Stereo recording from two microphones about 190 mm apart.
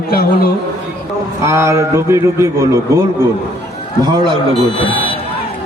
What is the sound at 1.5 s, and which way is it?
A man's voice, 15° right (ahead or behind).